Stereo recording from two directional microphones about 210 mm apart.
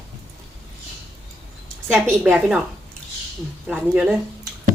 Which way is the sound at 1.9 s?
5° right (ahead or behind).